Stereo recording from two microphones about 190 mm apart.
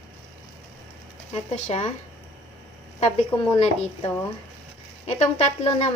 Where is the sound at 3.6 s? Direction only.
35° left (ahead or behind).